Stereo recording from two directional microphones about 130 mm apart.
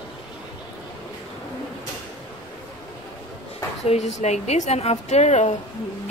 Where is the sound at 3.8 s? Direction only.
60° left (ahead or behind).